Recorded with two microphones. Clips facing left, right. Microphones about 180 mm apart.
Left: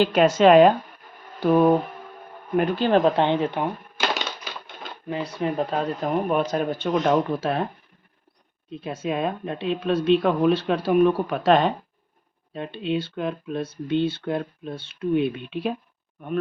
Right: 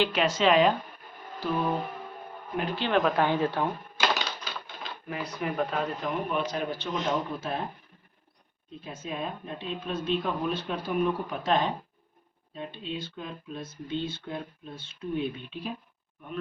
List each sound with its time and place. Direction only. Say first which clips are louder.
0.0 s speech: left 8 dB; 45° left (ahead or behind)
1.4 s a sound: left 11 dB; 55° left (ahead or behind)
2.6 s speech: left 7 dB; 45° left (ahead or behind)
3.0 s speech: left 5 dB; 25° left (ahead or behind)
5.0 s speech: left 7 dB; 30° left (ahead or behind)
6.0 s speech: left 7 dB; 45° left (ahead or behind); by 7.7 s 75° left (ahead or behind)
8.8 s speech: left 9 dB; 75° left (ahead or behind)